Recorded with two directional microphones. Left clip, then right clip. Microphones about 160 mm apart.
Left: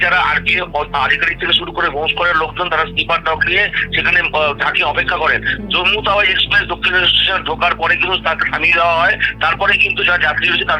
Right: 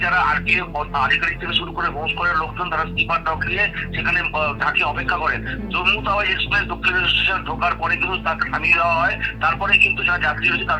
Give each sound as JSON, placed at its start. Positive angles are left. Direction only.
{"t": 0.0, "sound": "speech", "side_deg": 40}